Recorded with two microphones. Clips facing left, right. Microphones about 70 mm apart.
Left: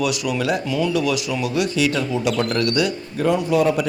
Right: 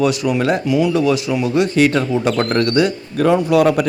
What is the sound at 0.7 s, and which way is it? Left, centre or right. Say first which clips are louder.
Speech: right 6 dB; centre.